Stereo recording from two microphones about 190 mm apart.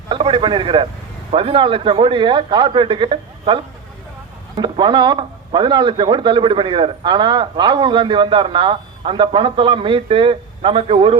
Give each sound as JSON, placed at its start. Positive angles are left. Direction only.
{"t": 0.1, "sound": "a man's voice", "side_deg": -25}